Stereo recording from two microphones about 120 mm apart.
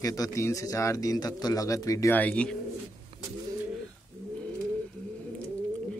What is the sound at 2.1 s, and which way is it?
Speech, 10° left (ahead or behind).